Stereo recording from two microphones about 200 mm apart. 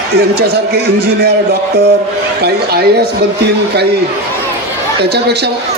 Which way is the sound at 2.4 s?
55° right (ahead or behind).